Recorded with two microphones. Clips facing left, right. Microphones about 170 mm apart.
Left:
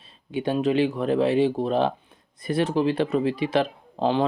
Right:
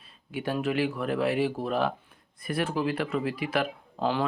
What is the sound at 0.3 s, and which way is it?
Speech, 20° left (ahead or behind).